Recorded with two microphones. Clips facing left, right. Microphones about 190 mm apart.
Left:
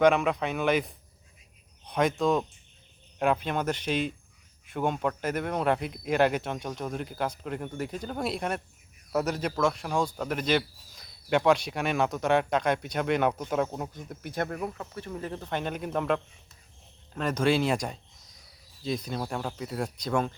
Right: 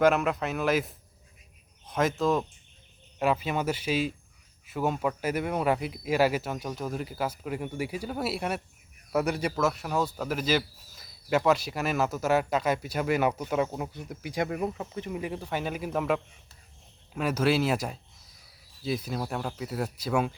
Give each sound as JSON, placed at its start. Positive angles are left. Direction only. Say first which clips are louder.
{"t": 0.0, "sound": "speech", "louder": "left 1 dB", "side_deg": 0}